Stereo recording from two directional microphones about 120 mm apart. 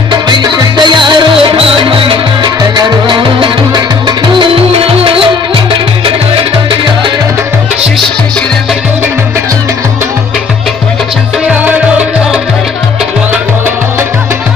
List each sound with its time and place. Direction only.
0.1 s music: 40° right (ahead or behind)